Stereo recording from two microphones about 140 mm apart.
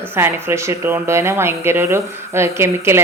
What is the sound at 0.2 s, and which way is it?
Speech, 15° right (ahead or behind).